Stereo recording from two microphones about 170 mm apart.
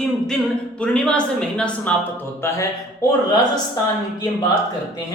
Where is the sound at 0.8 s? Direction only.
5° left (ahead or behind).